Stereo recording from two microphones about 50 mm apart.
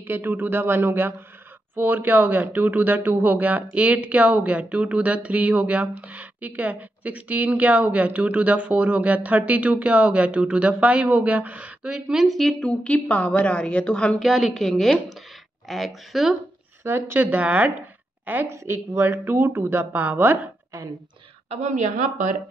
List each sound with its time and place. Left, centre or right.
0.0 s a man's voice: right
11.8 s a woman's voice: centre
12.4 s speech: centre
12.6 s a woman's voice: left
14.2 s a woman's voice: centre
16.8 s a woman's voice: right
17.2 s a woman's voice: right
18.9 s a man's voice: right